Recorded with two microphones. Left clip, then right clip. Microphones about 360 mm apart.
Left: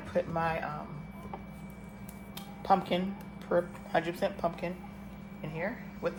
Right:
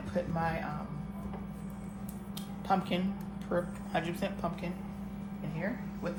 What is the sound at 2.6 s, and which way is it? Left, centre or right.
Speech, left.